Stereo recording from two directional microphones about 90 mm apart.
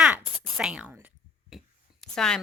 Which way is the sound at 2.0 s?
5° left (ahead or behind).